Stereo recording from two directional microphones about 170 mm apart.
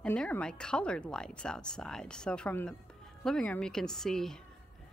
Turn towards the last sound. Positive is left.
turn(degrees=5)  # may be behind; listen again after turning